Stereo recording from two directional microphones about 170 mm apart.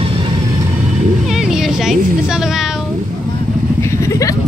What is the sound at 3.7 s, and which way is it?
Vehicle, 15° left (ahead or behind).